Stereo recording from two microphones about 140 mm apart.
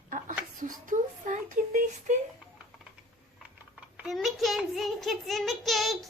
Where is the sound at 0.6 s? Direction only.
65° right (ahead or behind).